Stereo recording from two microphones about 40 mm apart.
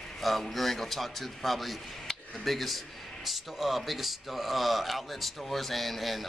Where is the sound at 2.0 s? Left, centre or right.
Centre.